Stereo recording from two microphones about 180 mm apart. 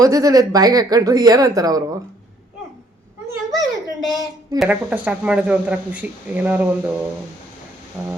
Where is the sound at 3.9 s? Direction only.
Centre (ahead or behind).